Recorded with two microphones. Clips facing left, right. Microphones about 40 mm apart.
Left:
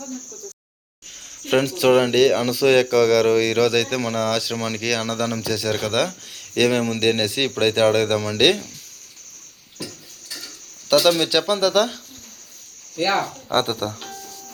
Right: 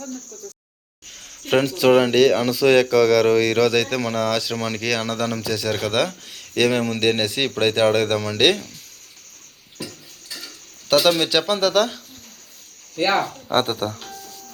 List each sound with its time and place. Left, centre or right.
1.5 s speech: centre
9.7 s dishes: centre
13.0 s speech: right
13.2 s speech: centre